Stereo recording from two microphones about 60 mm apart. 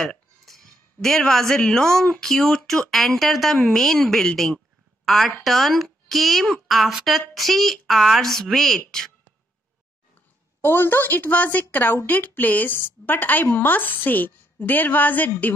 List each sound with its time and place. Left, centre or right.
0.0 s speech: centre
5.0 s speech: centre
10.6 s a woman's voice: left